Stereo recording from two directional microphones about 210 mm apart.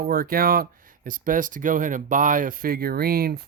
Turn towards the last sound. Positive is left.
turn(degrees=-45)  # may be behind; listen again after turning